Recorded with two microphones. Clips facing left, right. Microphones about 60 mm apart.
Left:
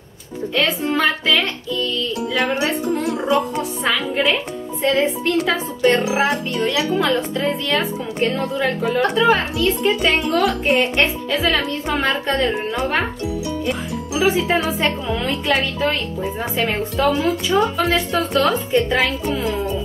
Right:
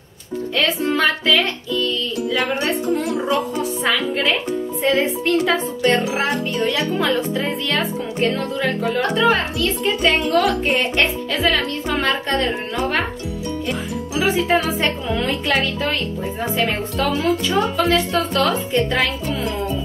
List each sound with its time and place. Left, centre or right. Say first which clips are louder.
0.6 s speech: even; centre
8.4 s speech: left 1 dB; centre